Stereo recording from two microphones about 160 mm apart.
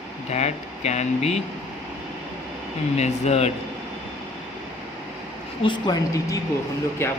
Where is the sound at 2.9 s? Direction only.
45° left (ahead or behind).